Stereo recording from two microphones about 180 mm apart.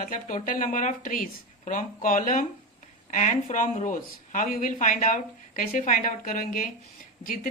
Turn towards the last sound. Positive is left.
turn(degrees=50)  # may be behind; listen again after turning